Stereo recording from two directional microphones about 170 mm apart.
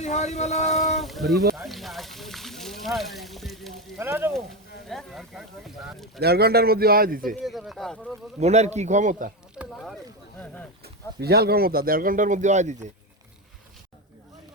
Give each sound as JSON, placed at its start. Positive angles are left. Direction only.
{"t": 0.0, "sound": "speech", "side_deg": 45}
{"t": 0.9, "sound": "speech", "side_deg": 0}
{"t": 1.5, "sound": "a sound", "side_deg": 0}
{"t": 3.9, "sound": "speech", "side_deg": -15}
{"t": 4.9, "sound": "speech", "side_deg": 0}
{"t": 6.1, "sound": "speech", "side_deg": -65}
{"t": 7.4, "sound": "speech", "side_deg": 0}
{"t": 8.4, "sound": "a man's voice", "side_deg": -40}
{"t": 9.6, "sound": "a sound", "side_deg": 20}
{"t": 10.8, "sound": "speech", "side_deg": -70}